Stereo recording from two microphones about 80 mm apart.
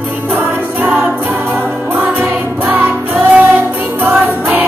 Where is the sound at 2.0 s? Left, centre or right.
Right.